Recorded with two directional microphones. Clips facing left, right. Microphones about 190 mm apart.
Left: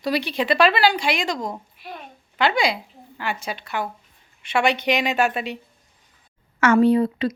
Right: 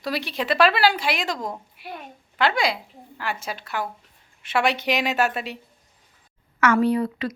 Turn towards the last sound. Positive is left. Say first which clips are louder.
# left 4 dB
turn(degrees=25)  # may be behind; listen again after turning